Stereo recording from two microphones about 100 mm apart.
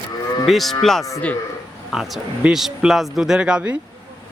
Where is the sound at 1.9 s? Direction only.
Centre (ahead or behind).